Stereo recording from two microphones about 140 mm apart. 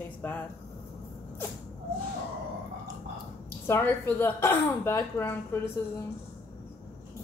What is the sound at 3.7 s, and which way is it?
A woman's voice, 15° left (ahead or behind).